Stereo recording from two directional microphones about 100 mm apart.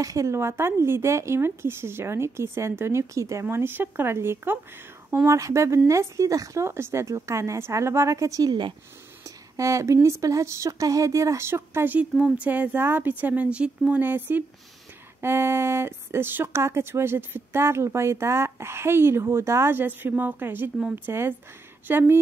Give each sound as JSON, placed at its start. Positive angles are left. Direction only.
{"t": 0.0, "sound": "speech", "side_deg": -35}
{"t": 9.6, "sound": "speech", "side_deg": -30}
{"t": 12.1, "sound": "speech", "side_deg": 0}
{"t": 12.4, "sound": "speech", "side_deg": -15}